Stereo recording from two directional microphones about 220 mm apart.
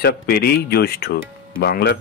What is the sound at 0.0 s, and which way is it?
Speech, 45° left (ahead or behind).